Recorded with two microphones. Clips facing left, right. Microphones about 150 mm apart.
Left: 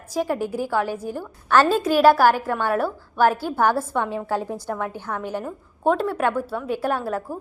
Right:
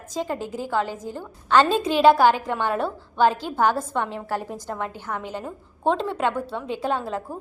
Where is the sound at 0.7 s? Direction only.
10° left (ahead or behind).